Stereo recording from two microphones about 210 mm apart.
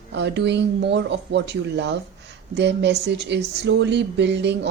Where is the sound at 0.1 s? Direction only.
55° right (ahead or behind).